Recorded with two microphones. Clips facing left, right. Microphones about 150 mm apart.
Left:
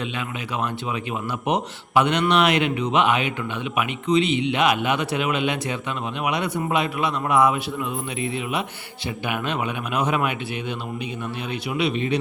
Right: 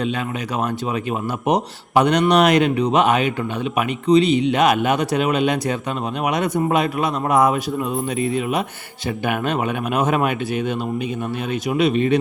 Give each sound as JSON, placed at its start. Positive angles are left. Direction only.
{"t": 1.5, "sound": "a man's voice", "side_deg": -40}
{"t": 11.7, "sound": "a man's voice", "side_deg": -45}